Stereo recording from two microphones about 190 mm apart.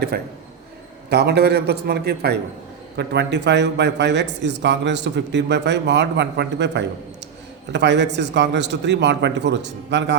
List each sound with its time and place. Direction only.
1.1 s speech: 60° right (ahead or behind)